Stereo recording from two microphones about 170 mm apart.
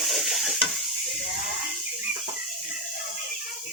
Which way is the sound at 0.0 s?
Centre (ahead or behind).